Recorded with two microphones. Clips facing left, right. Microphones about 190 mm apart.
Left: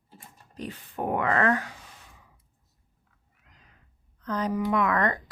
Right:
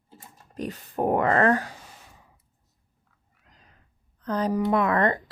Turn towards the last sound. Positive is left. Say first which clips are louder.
# right 3 dB
turn(degrees=-30)  # may be behind; listen again after turning